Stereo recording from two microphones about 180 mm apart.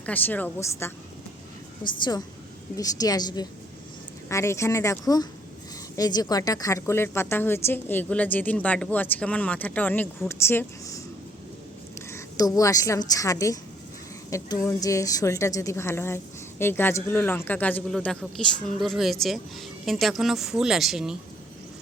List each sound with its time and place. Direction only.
0.0 s a woman's voice: 10° left (ahead or behind)
12.1 s a woman's voice: 20° left (ahead or behind); by 21.2 s centre (ahead or behind)